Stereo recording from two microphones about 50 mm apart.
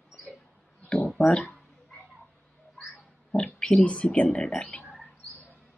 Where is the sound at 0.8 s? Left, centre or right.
Centre.